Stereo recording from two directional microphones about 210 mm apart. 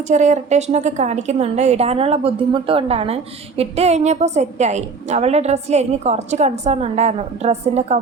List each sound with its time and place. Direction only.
0.1 s a woman's voice: 35° right (ahead or behind)